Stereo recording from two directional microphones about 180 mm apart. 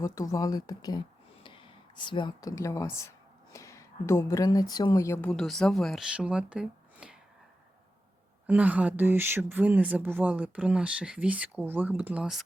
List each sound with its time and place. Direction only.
0.0 s speech: 20° left (ahead or behind); by 7.2 s 5° right (ahead or behind)
8.4 s speech: 10° right (ahead or behind)